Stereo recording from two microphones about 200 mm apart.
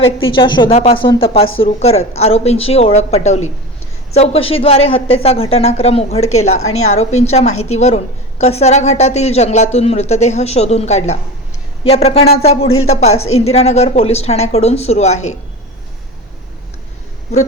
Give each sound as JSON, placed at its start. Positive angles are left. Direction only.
{"t": 0.3, "sound": "a woman's voice", "side_deg": 25}
{"t": 6.5, "sound": "a woman's voice", "side_deg": 90}
{"t": 6.8, "sound": "a woman's voice", "side_deg": 35}
{"t": 13.2, "sound": "a woman's voice", "side_deg": 90}
{"t": 13.5, "sound": "a woman's voice", "side_deg": 30}